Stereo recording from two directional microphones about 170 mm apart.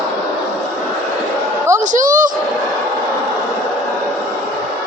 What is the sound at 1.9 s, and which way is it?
Speech, 50° right (ahead or behind).